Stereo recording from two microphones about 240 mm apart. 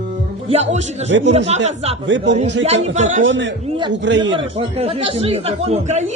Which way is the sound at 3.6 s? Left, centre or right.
Right.